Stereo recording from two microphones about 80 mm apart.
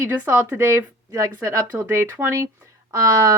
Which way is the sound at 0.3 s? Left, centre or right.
Right.